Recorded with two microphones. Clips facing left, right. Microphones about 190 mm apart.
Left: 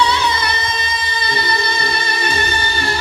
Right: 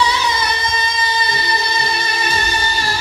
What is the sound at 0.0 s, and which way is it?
Music, 60° left (ahead or behind).